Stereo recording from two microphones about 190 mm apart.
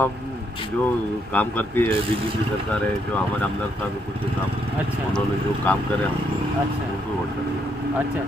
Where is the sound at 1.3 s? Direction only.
10° left (ahead or behind).